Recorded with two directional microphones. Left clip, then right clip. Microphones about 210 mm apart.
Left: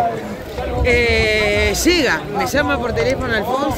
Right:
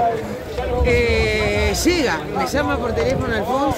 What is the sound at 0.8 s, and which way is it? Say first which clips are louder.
A man's voice: left 3 dB; 10° right (ahead or behind).